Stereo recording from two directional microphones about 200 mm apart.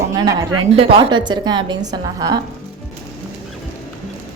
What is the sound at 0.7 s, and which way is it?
A woman's voice, 30° right (ahead or behind).